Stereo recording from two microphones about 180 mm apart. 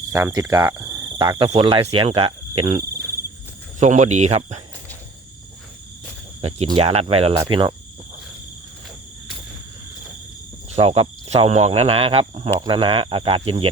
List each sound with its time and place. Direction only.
0.1 s cricket: 15° right (ahead or behind)
1.5 s speech: 30° right (ahead or behind)
3.8 s speech: 40° right (ahead or behind)
6.7 s speech: 35° right (ahead or behind)
7.3 s speech: 25° right (ahead or behind)
10.8 s speech: 35° right (ahead or behind)